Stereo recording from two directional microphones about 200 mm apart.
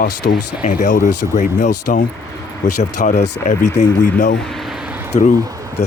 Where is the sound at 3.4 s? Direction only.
15° left (ahead or behind).